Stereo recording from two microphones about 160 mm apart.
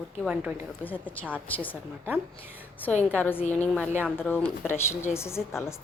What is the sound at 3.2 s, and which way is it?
A woman's voice, 10° left (ahead or behind).